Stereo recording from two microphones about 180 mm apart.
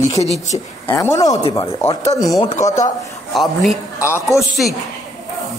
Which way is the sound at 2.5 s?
40° left (ahead or behind).